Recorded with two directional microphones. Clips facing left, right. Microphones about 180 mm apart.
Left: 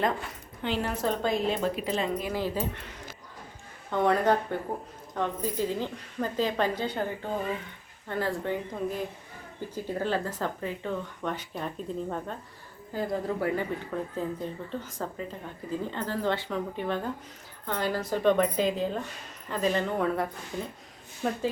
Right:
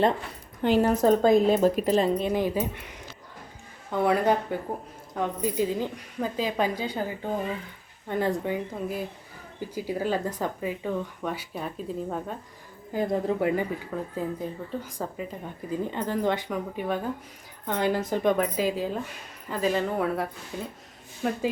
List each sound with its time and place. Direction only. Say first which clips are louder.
0.6 s speech: right 8 dB; 45° right (ahead or behind)
2.1 s speech: right 5 dB; 20° right (ahead or behind)
3.9 s speech: right 1 dB; 10° right (ahead or behind)
12.9 s speech: right 4 dB; 20° right (ahead or behind)
21.2 s speech: right 2 dB; 5° right (ahead or behind)